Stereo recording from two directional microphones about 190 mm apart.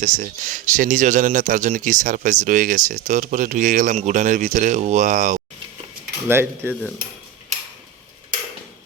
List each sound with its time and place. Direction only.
0.0 s speech: 45° right (ahead or behind)
6.2 s speech: 10° right (ahead or behind)